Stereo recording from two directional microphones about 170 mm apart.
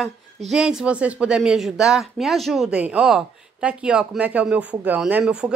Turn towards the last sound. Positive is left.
turn(degrees=-5)  # may be behind; listen again after turning